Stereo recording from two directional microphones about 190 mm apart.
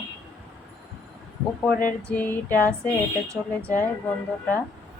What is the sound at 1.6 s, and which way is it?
Female singing, 5° left (ahead or behind).